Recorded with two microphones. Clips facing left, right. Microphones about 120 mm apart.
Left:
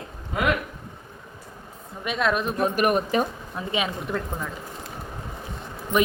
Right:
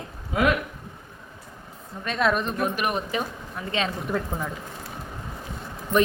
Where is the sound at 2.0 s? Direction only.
5° left (ahead or behind).